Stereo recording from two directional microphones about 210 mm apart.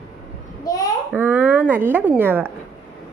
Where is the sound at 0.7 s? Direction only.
15° left (ahead or behind).